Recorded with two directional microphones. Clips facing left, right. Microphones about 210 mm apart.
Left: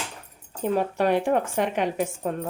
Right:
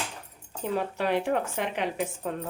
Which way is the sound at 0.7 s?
50° left (ahead or behind).